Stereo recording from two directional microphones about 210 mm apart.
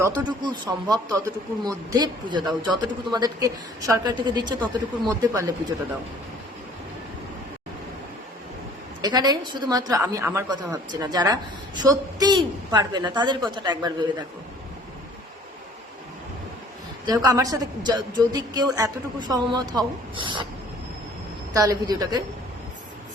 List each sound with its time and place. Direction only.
0.0 s a woman's voice: 20° right (ahead or behind)
9.0 s a woman's voice: 20° right (ahead or behind)
17.1 s a woman's voice: 15° right (ahead or behind)
21.5 s a woman's voice: 15° right (ahead or behind)